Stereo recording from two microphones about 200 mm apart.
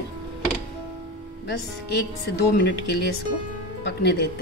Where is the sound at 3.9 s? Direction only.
55° left (ahead or behind).